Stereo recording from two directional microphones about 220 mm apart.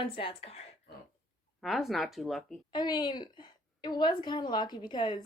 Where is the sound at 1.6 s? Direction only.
Centre (ahead or behind).